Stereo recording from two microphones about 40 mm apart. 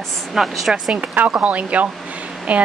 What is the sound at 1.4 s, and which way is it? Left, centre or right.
Speech, right.